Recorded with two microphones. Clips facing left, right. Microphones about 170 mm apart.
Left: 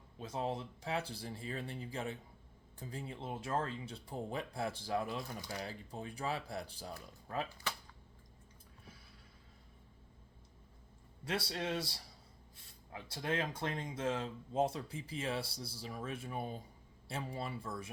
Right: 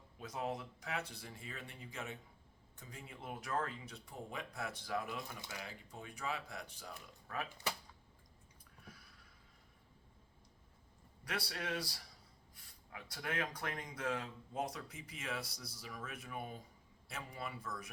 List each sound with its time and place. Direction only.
0.2 s speech: 30° left (ahead or behind)
11.3 s speech: 25° left (ahead or behind)